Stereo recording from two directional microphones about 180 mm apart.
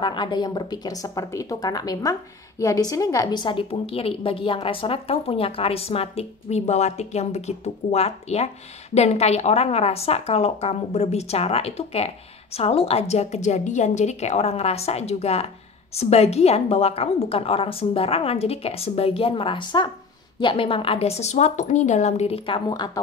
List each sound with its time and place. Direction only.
0.0 s a woman's voice: 25° left (ahead or behind)